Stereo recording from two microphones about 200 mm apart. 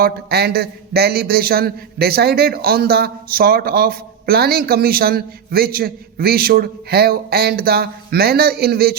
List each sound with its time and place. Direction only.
0.0 s a man's voice: 50° right (ahead or behind)